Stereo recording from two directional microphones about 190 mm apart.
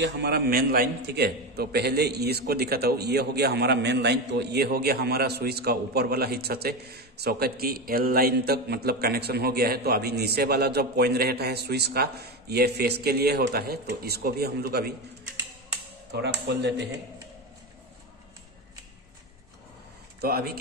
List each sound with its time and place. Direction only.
0.0 s a man's voice: 60° right (ahead or behind)
16.1 s a man's voice: 65° right (ahead or behind)
20.2 s speech: 55° right (ahead or behind)